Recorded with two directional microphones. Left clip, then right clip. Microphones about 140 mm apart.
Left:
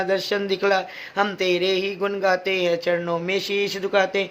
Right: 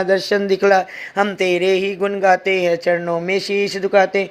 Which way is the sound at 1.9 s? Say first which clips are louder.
Right 6 dB; 25° right (ahead or behind).